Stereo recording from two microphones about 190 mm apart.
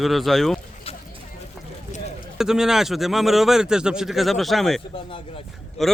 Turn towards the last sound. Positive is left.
turn(degrees=0)  # may be behind; listen again after turning